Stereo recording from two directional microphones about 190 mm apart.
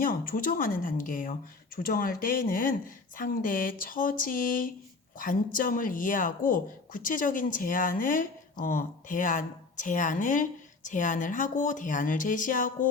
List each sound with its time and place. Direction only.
0.0 s speech: 45° left (ahead or behind)